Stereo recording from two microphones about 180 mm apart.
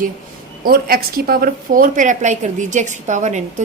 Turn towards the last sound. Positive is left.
turn(degrees=-40)  # may be behind; listen again after turning